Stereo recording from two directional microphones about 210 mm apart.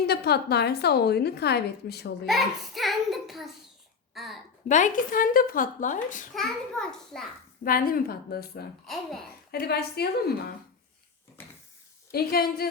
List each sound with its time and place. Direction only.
0.0 s a woman's voice: 50° left (ahead or behind)
2.2 s a child's voice: centre (ahead or behind)
4.7 s speech: 40° left (ahead or behind)
6.3 s a child's voice: centre (ahead or behind)
7.6 s a woman's voice: 45° left (ahead or behind)
12.1 s a woman's voice: 45° left (ahead or behind)